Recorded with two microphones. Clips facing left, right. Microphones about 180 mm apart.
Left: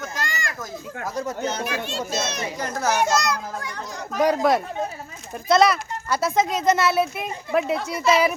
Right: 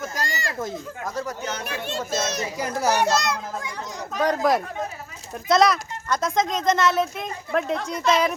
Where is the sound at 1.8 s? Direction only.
50° right (ahead or behind).